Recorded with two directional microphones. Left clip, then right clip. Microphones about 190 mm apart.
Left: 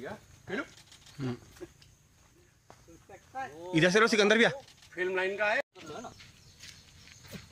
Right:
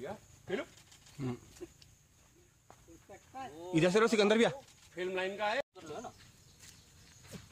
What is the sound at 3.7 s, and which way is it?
A man's voice, 10° left (ahead or behind).